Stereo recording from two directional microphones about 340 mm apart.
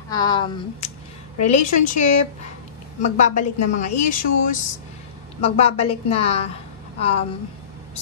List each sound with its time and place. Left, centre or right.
0.1 s a woman's voice: centre